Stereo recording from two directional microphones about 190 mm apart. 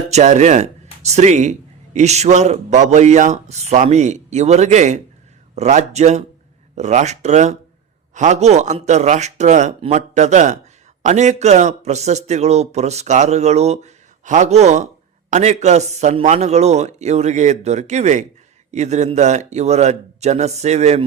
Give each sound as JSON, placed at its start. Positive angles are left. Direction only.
{"t": 0.1, "sound": "speech", "side_deg": -40}